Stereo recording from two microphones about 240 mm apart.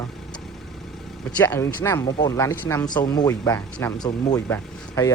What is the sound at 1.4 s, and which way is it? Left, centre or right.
Speech, centre.